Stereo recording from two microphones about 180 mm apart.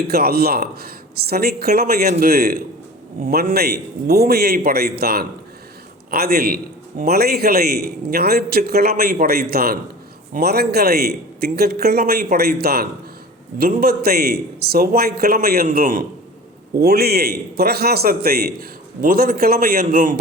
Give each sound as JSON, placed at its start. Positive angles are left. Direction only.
{"t": 0.1, "sound": "a man's voice", "side_deg": -60}